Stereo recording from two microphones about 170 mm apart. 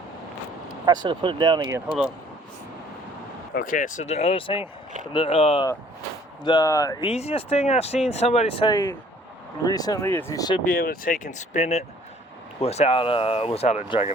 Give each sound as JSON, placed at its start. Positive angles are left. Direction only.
{"t": 0.9, "sound": "speech", "side_deg": -30}
{"t": 3.5, "sound": "speech", "side_deg": 55}
{"t": 6.4, "sound": "speech", "side_deg": 25}
{"t": 7.1, "sound": "speech", "side_deg": 35}
{"t": 8.7, "sound": "speech", "side_deg": 20}
{"t": 10.7, "sound": "speech", "side_deg": 60}